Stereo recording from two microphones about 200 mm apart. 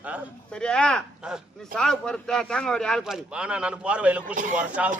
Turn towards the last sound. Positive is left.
turn(degrees=-5)  # may be behind; listen again after turning